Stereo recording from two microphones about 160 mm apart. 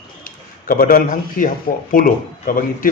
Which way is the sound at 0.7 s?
60° left (ahead or behind).